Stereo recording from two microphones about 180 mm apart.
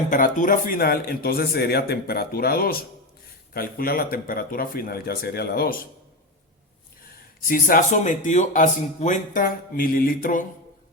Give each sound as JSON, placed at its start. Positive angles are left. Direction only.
{"t": 0.1, "sound": "speech", "side_deg": 45}
{"t": 7.4, "sound": "speech", "side_deg": 50}